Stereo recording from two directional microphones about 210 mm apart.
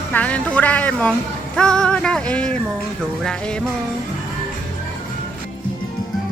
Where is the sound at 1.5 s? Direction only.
5° left (ahead or behind).